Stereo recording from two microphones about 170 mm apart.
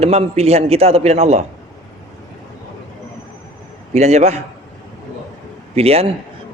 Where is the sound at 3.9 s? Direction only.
40° right (ahead or behind).